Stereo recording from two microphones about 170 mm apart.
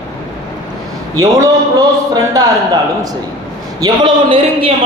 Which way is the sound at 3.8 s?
30° right (ahead or behind).